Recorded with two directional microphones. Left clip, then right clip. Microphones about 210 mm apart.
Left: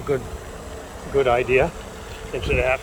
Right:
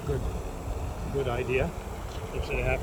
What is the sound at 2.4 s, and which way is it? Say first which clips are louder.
Speech: left 10 dB; 50° left (ahead or behind).